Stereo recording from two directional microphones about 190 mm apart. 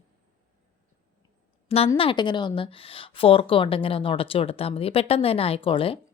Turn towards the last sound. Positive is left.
turn(degrees=30)  # may be behind; listen again after turning